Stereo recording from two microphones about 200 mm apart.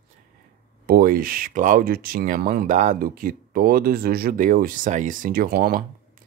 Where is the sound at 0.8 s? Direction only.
45° right (ahead or behind).